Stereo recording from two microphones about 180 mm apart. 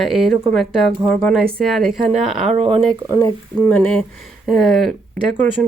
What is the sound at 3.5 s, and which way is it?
Speech, 5° left (ahead or behind).